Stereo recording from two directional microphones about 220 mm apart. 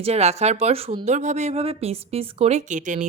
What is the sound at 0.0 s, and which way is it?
A woman's voice, 30° right (ahead or behind).